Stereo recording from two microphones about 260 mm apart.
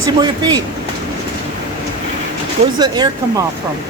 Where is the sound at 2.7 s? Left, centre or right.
Centre.